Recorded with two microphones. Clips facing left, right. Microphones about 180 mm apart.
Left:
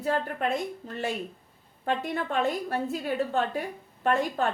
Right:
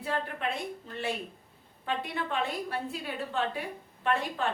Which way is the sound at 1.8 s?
45° left (ahead or behind).